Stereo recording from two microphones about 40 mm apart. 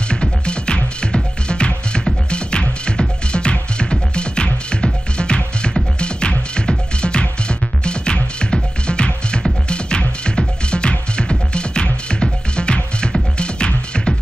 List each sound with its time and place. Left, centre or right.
0.1 s music: left